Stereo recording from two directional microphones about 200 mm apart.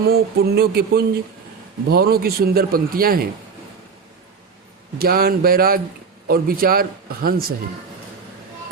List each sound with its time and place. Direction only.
0.0 s a man's voice: 50° right (ahead or behind)
4.9 s a man's voice: 50° right (ahead or behind)